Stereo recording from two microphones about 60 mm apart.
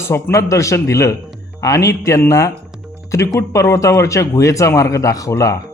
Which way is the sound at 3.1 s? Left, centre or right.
Left.